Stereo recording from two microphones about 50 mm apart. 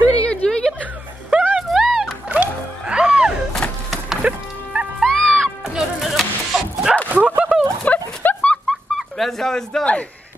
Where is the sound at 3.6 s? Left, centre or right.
Left.